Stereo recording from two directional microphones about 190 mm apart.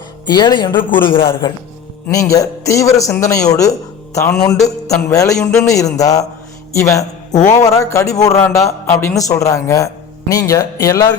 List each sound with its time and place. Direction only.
0.3 s a man's voice: 20° left (ahead or behind)